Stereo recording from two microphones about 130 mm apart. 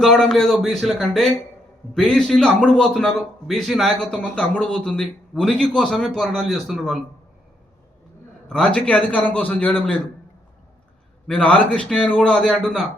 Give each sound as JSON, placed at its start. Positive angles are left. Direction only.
{"t": 0.0, "sound": "a man's voice", "side_deg": 5}
{"t": 8.4, "sound": "a man's voice", "side_deg": 10}
{"t": 11.3, "sound": "a man's voice", "side_deg": 10}